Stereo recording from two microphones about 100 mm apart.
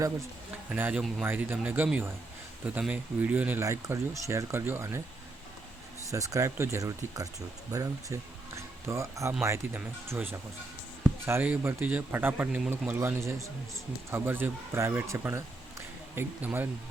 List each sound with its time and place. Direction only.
0.7 s speech: 15° right (ahead or behind)
3.6 s speech: 30° right (ahead or behind)
6.1 s speech: 35° right (ahead or behind)
9.7 s speech: 20° right (ahead or behind)
11.3 s speech: 20° right (ahead or behind)
12.9 s speech: 25° right (ahead or behind)